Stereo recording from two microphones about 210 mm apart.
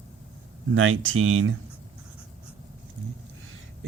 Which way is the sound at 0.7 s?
70° right (ahead or behind).